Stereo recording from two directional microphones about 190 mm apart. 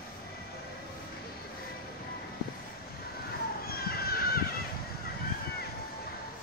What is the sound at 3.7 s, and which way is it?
Children playing, 55° left (ahead or behind).